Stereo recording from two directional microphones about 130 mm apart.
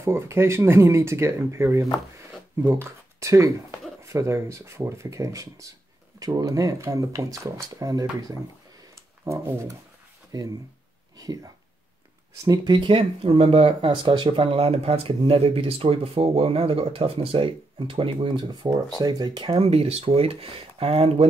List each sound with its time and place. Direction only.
0.0 s speech: 20° right (ahead or behind)
8.9 s a sound: 20° right (ahead or behind)
10.3 s speech: 30° right (ahead or behind)
12.4 s speech: 35° right (ahead or behind)
19.6 s speech: 50° right (ahead or behind)